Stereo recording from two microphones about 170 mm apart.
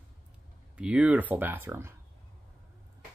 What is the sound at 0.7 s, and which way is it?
Speech, 5° right (ahead or behind).